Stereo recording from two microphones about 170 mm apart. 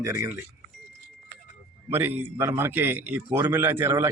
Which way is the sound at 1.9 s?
10° right (ahead or behind).